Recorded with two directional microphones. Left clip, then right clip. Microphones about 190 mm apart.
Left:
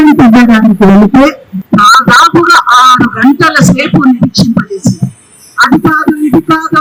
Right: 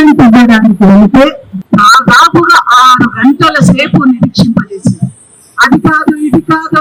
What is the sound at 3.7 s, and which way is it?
Speech, 5° right (ahead or behind).